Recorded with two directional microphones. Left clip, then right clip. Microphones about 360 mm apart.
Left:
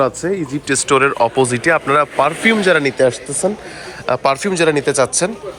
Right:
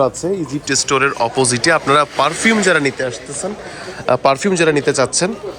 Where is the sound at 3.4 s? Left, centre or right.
Centre.